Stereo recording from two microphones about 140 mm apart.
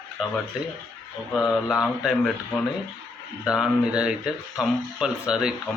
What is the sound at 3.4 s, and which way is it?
Speech, 5° right (ahead or behind).